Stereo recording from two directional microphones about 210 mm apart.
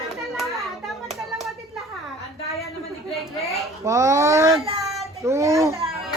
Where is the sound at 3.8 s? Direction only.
15° right (ahead or behind).